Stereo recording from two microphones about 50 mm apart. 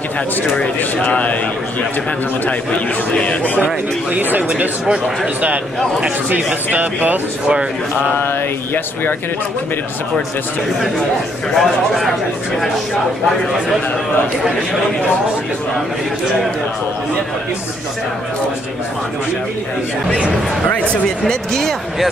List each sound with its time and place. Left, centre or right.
2.4 s a man's voice: left
3.5 s speech: right
4.8 s speech: centre
6.3 s speech: right
11.5 s speech: centre
21.3 s speech: centre